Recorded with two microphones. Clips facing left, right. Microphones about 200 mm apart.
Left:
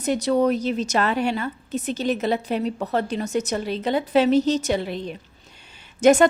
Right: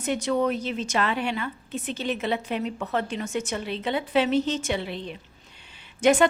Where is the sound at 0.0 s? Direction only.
40° left (ahead or behind).